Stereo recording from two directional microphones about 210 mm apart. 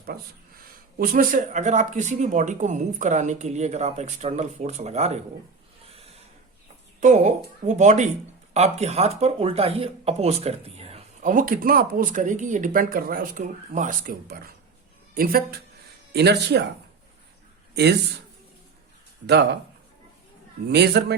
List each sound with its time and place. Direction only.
0.9 s speech: 45° right (ahead or behind)
5.9 s a sound: 30° right (ahead or behind)
7.0 s a woman's voice: 35° right (ahead or behind); by 16.6 s 55° right (ahead or behind)
19.3 s a woman's voice: 50° right (ahead or behind)
20.7 s a woman's voice: 50° right (ahead or behind)